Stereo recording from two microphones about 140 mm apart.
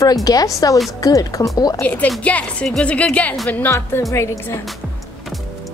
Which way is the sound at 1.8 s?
10° left (ahead or behind).